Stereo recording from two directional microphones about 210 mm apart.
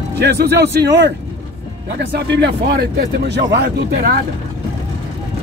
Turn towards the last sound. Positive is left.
turn(degrees=-50)  # may be behind; listen again after turning